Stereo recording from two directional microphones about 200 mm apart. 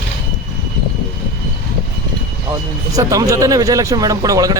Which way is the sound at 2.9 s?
15° right (ahead or behind).